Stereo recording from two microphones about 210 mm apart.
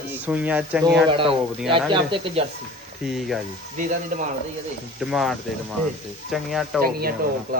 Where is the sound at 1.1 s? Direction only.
25° right (ahead or behind).